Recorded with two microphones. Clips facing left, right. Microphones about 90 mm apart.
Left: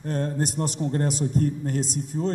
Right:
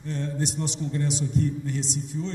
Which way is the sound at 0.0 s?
45° left (ahead or behind).